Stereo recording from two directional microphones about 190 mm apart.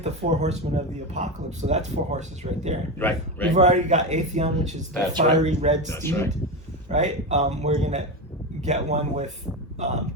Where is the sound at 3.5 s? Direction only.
35° right (ahead or behind).